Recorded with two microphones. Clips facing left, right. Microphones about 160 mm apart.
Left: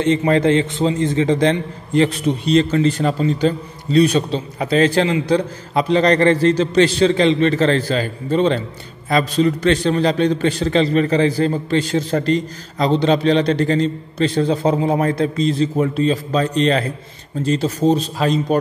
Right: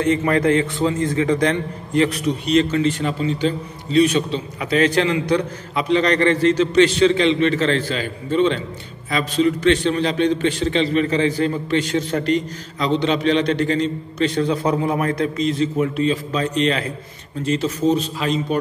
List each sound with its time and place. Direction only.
0.0 s a man's voice: 25° left (ahead or behind)